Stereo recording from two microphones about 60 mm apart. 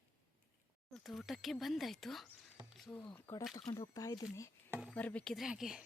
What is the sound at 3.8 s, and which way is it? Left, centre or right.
Speech, left.